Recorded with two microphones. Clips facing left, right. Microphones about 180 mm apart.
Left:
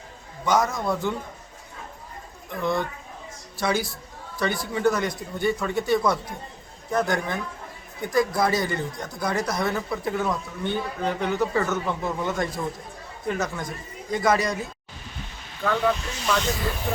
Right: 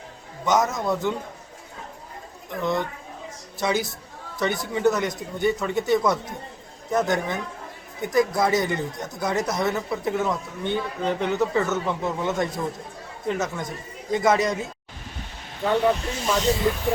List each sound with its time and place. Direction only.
0.4 s speech: 20° right (ahead or behind)
2.6 s speech: 20° right (ahead or behind)